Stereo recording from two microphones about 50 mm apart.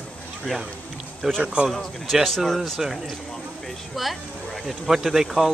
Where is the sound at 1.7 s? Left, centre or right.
Centre.